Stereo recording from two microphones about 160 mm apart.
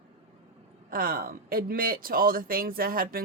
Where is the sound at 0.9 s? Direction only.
65° right (ahead or behind).